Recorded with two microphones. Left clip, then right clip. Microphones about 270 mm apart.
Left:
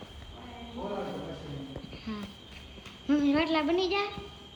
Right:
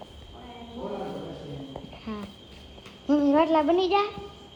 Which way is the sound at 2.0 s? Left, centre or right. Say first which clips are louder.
Right 3 dB; centre.